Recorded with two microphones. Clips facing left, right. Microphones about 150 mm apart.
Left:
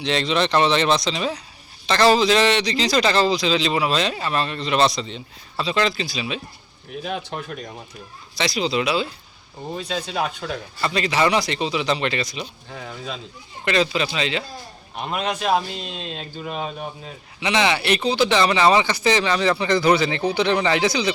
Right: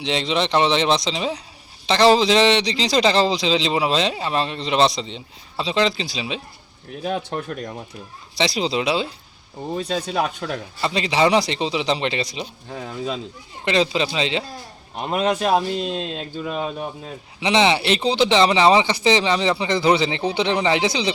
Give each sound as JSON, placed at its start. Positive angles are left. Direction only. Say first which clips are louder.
{"t": 0.0, "sound": "a man's voice", "louder": "left 1 dB", "side_deg": -20}
{"t": 7.0, "sound": "speech", "louder": "right 4 dB", "side_deg": -45}
{"t": 8.4, "sound": "a man's voice", "louder": "right 1 dB", "side_deg": -30}
{"t": 9.7, "sound": "speech", "louder": "right 3 dB", "side_deg": -45}
{"t": 10.8, "sound": "a man's voice", "louder": "right 1 dB", "side_deg": -25}
{"t": 15.1, "sound": "a man's voice", "louder": "right 3 dB", "side_deg": -40}
{"t": 17.4, "sound": "a man's voice", "louder": "right 3 dB", "side_deg": -25}